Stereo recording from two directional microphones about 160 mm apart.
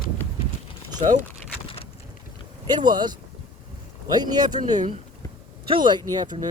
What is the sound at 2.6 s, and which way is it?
Speech, 25° right (ahead or behind).